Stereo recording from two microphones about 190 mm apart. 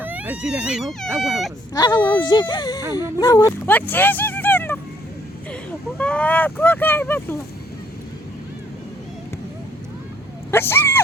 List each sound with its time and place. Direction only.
0.0 s baby cry: 10° right (ahead or behind)
1.2 s speech: centre (ahead or behind)
1.7 s speech: 20° left (ahead or behind)
6.0 s speech: 5° left (ahead or behind)
10.5 s speech: 10° left (ahead or behind)